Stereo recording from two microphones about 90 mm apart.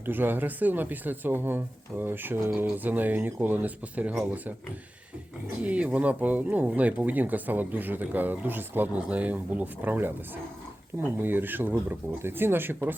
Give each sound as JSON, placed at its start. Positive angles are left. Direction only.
{"t": 0.0, "sound": "speech", "side_deg": -20}
{"t": 5.6, "sound": "speech", "side_deg": -15}
{"t": 11.2, "sound": "speech", "side_deg": -20}